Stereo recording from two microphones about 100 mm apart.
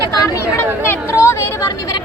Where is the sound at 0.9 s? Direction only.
25° left (ahead or behind).